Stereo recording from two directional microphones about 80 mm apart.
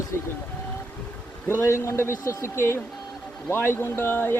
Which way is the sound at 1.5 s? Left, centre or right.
Left.